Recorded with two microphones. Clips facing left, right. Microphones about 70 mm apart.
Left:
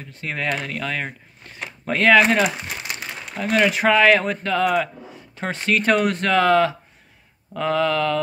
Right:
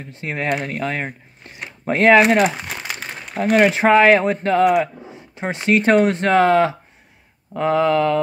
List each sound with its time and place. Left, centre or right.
0.0 s speech: right
3.5 s speech: right
4.6 s speech: centre